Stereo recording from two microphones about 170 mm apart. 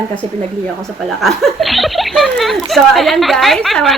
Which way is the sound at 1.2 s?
Centre (ahead or behind).